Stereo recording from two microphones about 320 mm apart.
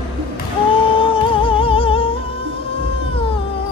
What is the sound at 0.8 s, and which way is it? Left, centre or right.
Music, centre.